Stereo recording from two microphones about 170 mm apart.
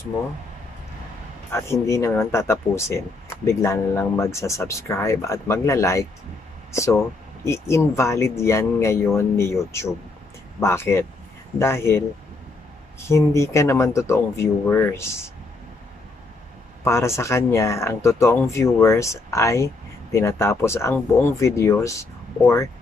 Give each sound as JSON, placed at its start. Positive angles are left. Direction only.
{"t": 1.5, "sound": "speech", "side_deg": 15}
{"t": 13.1, "sound": "speech", "side_deg": 15}
{"t": 16.8, "sound": "speech", "side_deg": 15}